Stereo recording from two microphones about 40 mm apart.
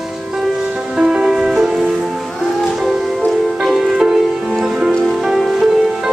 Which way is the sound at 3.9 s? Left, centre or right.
Centre.